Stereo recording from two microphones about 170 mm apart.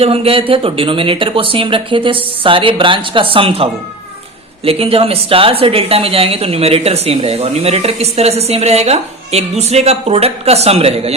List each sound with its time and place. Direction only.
0.0 s a woman's voice: 35° right (ahead or behind)